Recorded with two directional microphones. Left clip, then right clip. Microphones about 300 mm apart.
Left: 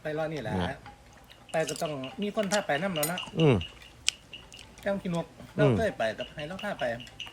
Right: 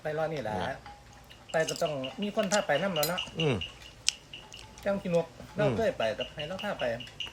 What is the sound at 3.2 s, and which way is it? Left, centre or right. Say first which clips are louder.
Speech: left 5 dB; centre.